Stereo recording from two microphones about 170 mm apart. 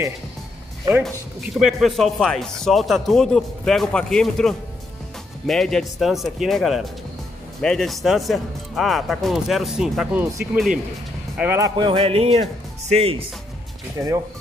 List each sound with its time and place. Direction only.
1.0 s speech: centre (ahead or behind)
11.3 s a man's voice: 15° right (ahead or behind); by 13.2 s 35° right (ahead or behind)
13.9 s speech: 20° right (ahead or behind)